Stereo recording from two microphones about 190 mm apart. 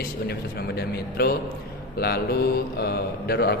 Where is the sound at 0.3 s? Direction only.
55° left (ahead or behind).